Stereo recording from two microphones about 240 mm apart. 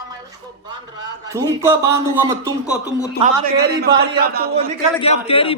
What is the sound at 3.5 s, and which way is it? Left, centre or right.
A man's voice, right.